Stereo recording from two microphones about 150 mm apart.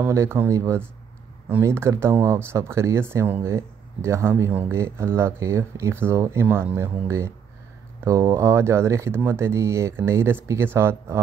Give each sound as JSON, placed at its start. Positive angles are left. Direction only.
{"t": 0.0, "sound": "speech", "side_deg": -15}